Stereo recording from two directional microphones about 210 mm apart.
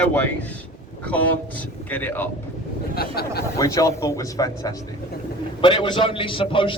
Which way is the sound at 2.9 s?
45° left (ahead or behind).